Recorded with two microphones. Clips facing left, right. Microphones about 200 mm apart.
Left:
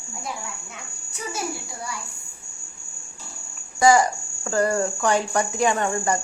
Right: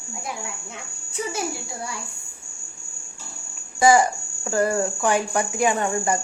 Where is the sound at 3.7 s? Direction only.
20° right (ahead or behind).